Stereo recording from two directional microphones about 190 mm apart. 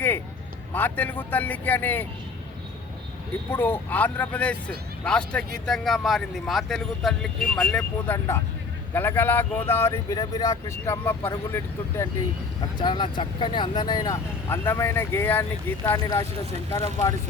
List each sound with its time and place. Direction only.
0.7 s speech: 10° left (ahead or behind)
3.5 s speech: 10° left (ahead or behind)
12.8 s speech: 25° left (ahead or behind)